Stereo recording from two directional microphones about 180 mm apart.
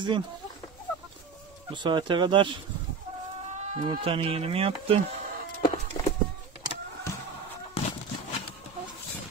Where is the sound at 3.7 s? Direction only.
30° right (ahead or behind).